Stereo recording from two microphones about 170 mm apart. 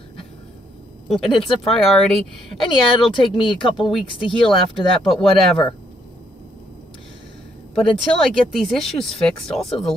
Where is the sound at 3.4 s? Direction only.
30° left (ahead or behind).